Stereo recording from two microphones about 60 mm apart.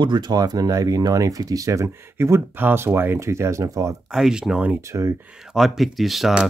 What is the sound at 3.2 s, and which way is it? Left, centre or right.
Speech, right.